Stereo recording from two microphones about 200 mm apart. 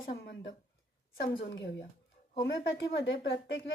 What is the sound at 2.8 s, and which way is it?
Speech, 65° left (ahead or behind).